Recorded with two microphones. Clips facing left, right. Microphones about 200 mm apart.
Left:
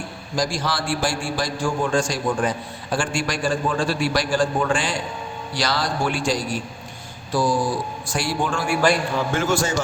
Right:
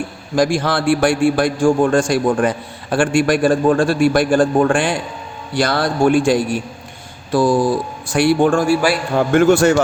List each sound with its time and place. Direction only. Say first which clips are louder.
0.3 s a man's voice: right 8 dB; 60° right (ahead or behind)